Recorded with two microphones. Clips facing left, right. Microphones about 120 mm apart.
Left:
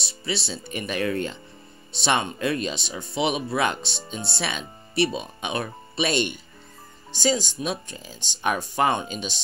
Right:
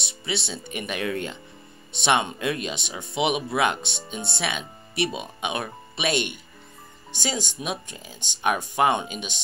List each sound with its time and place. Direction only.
0.0 s speech: 20° right (ahead or behind)